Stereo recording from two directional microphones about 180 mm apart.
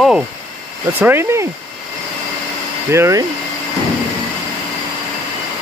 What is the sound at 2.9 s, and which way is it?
Speech, 15° right (ahead or behind).